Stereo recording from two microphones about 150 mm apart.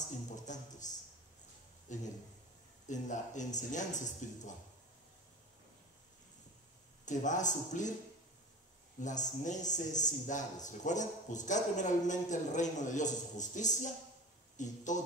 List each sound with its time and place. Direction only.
0.5 s music: 55° left (ahead or behind)
1.9 s a man's voice: 55° left (ahead or behind)
7.1 s a man's voice: 55° left (ahead or behind)
9.0 s a man's voice: 55° left (ahead or behind)